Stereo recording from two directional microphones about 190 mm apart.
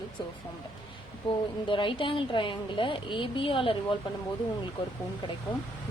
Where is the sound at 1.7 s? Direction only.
25° left (ahead or behind).